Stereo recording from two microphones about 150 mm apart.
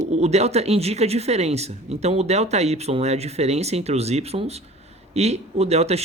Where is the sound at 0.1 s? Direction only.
45° right (ahead or behind).